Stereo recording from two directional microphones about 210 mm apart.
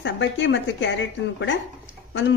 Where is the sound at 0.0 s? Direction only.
60° left (ahead or behind).